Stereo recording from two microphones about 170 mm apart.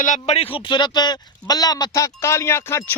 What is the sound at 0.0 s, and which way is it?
Speech, 45° left (ahead or behind).